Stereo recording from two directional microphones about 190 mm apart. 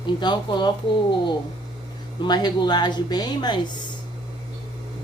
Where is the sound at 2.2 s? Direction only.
20° left (ahead or behind).